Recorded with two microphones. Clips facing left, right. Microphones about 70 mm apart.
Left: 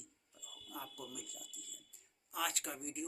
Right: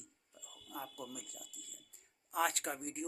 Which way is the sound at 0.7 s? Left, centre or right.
Right.